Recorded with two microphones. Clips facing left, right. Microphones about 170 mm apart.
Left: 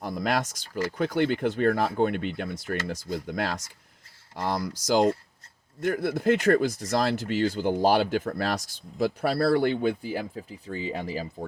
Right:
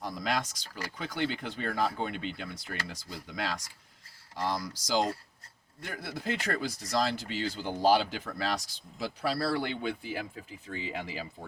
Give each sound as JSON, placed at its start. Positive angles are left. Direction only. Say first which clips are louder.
{"t": 0.0, "sound": "speech", "louder": "left 5 dB", "side_deg": 55}